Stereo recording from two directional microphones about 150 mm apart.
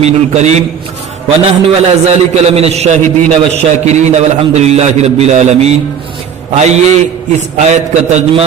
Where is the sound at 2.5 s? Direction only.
45° right (ahead or behind).